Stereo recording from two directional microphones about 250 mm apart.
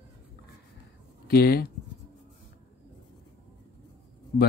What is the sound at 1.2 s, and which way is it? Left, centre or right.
Speech, left.